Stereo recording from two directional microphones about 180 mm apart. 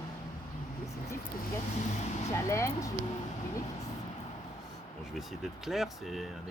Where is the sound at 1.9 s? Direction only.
40° left (ahead or behind).